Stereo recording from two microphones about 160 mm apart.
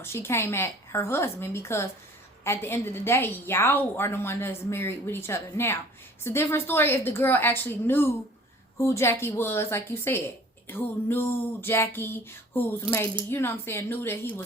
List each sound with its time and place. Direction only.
0.0 s a woman's voice: 15° left (ahead or behind)